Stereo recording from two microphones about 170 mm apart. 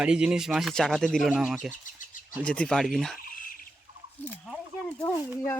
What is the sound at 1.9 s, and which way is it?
Bird, 50° left (ahead or behind).